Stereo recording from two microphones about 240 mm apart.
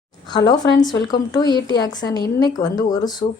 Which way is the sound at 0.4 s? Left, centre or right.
Centre.